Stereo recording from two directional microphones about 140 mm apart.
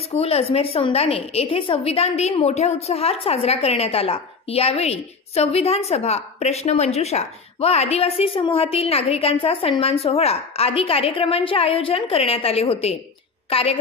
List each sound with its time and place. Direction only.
0.1 s a woman's voice: 45° left (ahead or behind)